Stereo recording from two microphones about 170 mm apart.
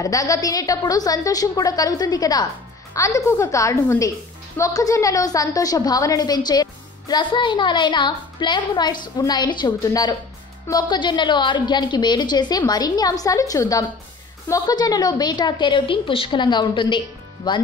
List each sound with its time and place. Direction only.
0.0 s a woman's voice: 20° left (ahead or behind)